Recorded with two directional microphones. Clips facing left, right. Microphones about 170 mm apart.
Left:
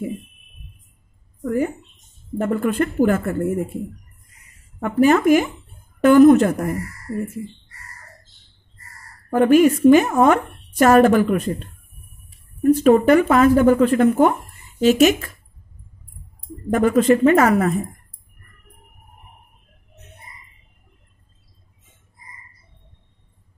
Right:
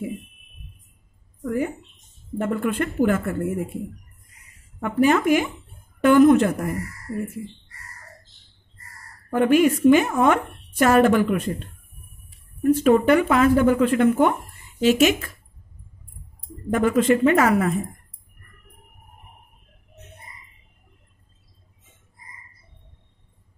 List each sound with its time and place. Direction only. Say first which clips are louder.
1.4 s a sound: left 3 dB; 45° left (ahead or behind)
2.3 s speech: left 3 dB; 40° left (ahead or behind)
4.7 s a woman's voice: left 3 dB; 45° left (ahead or behind)
9.3 s a woman's voice: left 4 dB; 40° left (ahead or behind)
12.6 s a woman's voice: left 3 dB; 40° left (ahead or behind)
16.7 s speech: left 3 dB; 40° left (ahead or behind)